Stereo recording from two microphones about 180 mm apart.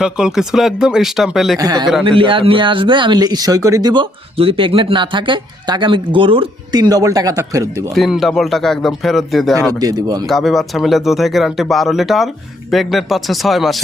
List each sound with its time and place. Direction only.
0.0 s speech: 5° right (ahead or behind)
1.5 s speech: 20° right (ahead or behind)
7.9 s speech: centre (ahead or behind)
9.7 s speech: 20° right (ahead or behind)
10.2 s speech: centre (ahead or behind)